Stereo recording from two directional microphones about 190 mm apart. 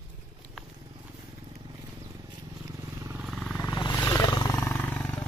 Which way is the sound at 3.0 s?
15° right (ahead or behind).